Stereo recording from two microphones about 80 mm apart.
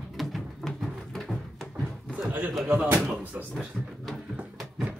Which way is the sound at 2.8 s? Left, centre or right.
Right.